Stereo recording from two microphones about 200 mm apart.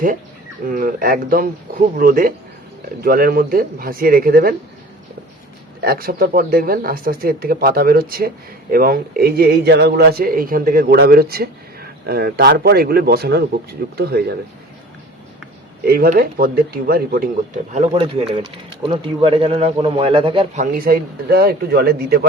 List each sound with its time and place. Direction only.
0.7 s speech: 45° right (ahead or behind)
5.8 s speech: 50° right (ahead or behind)
15.9 s speech: 45° right (ahead or behind)
17.7 s speech: 25° right (ahead or behind)
20.6 s speech: 45° right (ahead or behind)